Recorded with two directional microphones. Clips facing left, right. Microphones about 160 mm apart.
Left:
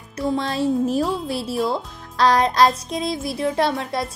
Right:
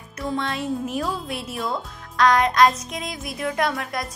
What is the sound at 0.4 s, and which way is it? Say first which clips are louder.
Speech: left 6 dB; 35° left (ahead or behind).